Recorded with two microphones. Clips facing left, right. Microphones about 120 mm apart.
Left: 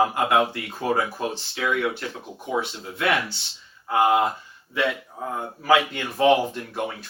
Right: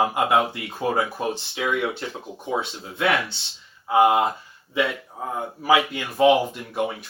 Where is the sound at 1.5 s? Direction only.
25° right (ahead or behind).